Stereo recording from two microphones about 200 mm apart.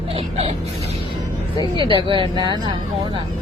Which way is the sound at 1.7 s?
25° right (ahead or behind).